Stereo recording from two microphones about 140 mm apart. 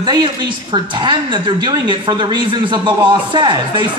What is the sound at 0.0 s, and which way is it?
A man's voice, 30° right (ahead or behind).